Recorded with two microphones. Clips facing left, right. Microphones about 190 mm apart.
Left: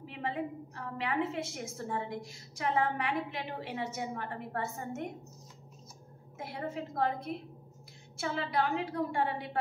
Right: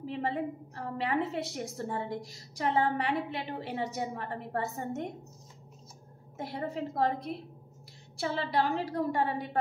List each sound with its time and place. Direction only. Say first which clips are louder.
0.0 s a woman's voice: right 4 dB; 35° right (ahead or behind)
6.3 s a woman's voice: right 3 dB; 35° right (ahead or behind)